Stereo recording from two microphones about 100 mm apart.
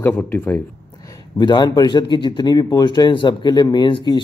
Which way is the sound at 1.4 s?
50° left (ahead or behind).